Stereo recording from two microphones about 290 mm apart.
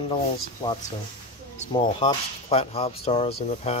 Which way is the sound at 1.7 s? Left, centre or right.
Centre.